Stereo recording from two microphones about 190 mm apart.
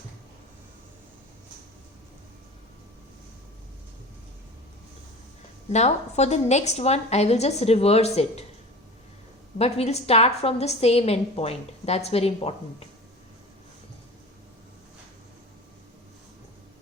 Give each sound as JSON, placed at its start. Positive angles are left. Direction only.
{"t": 5.7, "sound": "a woman's voice", "side_deg": 35}
{"t": 9.6, "sound": "a woman's voice", "side_deg": 35}